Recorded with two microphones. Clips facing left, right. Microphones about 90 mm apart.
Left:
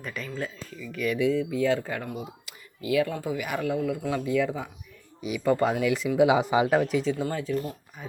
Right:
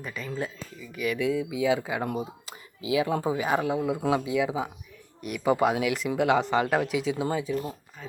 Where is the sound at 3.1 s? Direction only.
30° right (ahead or behind).